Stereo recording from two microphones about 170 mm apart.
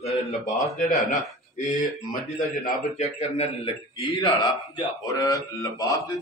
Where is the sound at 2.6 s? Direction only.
40° left (ahead or behind).